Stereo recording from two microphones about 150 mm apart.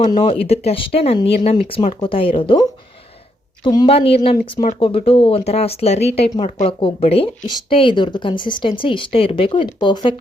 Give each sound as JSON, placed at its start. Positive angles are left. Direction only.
{"t": 0.1, "sound": "a woman's voice", "side_deg": 35}
{"t": 3.8, "sound": "speech", "side_deg": 40}